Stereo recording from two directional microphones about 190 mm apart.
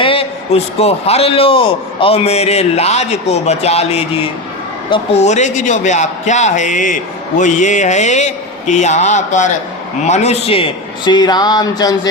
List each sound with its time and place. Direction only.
0.0 s a man's voice: 30° left (ahead or behind)